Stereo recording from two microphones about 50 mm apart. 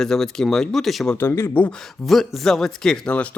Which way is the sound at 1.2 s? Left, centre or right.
Left.